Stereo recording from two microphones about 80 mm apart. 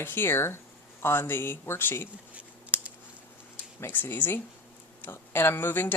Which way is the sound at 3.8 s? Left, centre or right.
Left.